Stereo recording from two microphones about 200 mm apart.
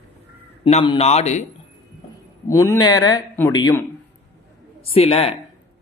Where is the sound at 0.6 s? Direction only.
35° left (ahead or behind).